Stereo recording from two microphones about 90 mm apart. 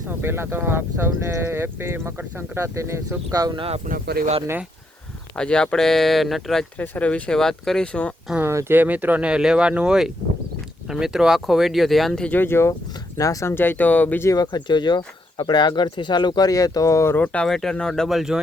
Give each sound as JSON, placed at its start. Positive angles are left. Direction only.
{"t": 0.1, "sound": "speech", "side_deg": -25}
{"t": 3.3, "sound": "speech", "side_deg": -45}
{"t": 5.4, "sound": "speech", "side_deg": 10}
{"t": 6.7, "sound": "speech", "side_deg": 20}
{"t": 8.4, "sound": "speech", "side_deg": -30}
{"t": 12.3, "sound": "speech", "side_deg": 25}
{"t": 13.1, "sound": "speech", "side_deg": 40}
{"t": 13.5, "sound": "speech", "side_deg": 25}
{"t": 14.4, "sound": "speech", "side_deg": 55}
{"t": 17.2, "sound": "speech", "side_deg": 10}